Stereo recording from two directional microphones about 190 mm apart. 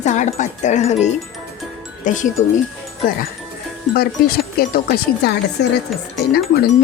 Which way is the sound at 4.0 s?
50° left (ahead or behind).